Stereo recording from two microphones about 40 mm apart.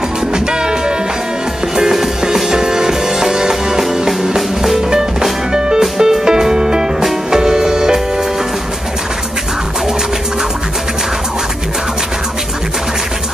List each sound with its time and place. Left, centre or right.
0.3 s music: centre